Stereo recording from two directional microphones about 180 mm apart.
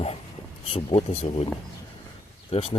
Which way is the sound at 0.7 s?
35° left (ahead or behind).